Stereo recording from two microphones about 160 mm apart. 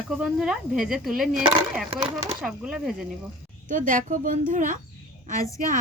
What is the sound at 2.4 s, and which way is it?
Speech, 5° right (ahead or behind).